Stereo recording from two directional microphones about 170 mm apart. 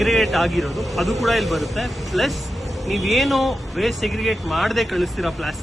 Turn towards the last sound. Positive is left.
turn(degrees=0)  # may be behind; listen again after turning